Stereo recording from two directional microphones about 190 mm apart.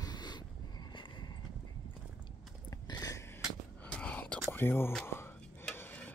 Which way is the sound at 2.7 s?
20° left (ahead or behind).